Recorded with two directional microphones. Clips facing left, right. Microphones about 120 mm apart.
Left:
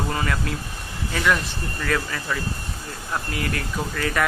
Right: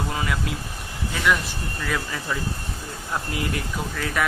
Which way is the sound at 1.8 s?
10° right (ahead or behind).